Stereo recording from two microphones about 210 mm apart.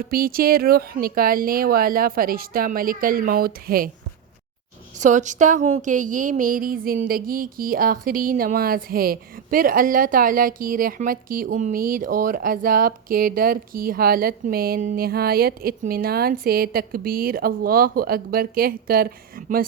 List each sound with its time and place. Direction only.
0.1 s speech: 45° right (ahead or behind)
4.9 s speech: 35° right (ahead or behind)